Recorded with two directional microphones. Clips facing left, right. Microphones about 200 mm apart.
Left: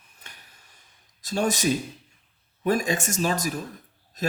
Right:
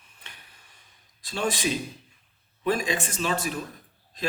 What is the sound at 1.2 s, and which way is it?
Speech, 45° left (ahead or behind).